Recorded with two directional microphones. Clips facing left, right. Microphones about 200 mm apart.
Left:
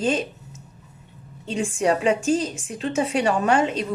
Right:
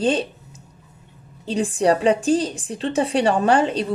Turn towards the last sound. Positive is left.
turn(degrees=-35)  # may be behind; listen again after turning